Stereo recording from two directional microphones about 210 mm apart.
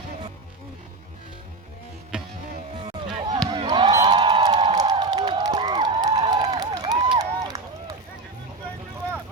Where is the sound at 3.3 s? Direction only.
20° right (ahead or behind).